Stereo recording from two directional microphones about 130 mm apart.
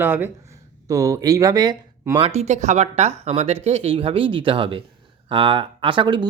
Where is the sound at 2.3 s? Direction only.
60° right (ahead or behind).